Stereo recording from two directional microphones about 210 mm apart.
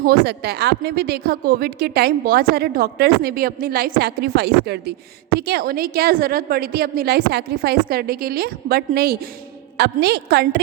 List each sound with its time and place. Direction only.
0.0 s a woman's voice: 50° right (ahead or behind)